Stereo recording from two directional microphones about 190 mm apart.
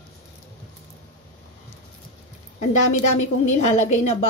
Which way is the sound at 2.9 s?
35° left (ahead or behind).